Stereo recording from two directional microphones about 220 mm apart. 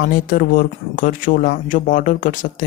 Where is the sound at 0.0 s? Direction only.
40° left (ahead or behind).